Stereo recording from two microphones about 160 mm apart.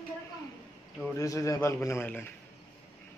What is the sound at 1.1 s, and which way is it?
A man's voice, 20° left (ahead or behind).